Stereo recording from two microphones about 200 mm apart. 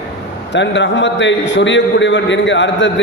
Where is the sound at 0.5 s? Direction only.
65° left (ahead or behind).